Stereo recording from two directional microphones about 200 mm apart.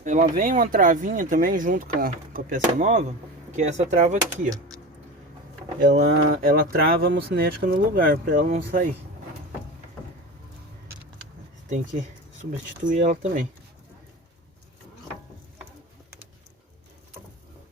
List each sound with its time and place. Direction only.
0.0 s speech: 40° right (ahead or behind)
5.8 s speech: 40° right (ahead or behind)
12.4 s speech: 40° right (ahead or behind)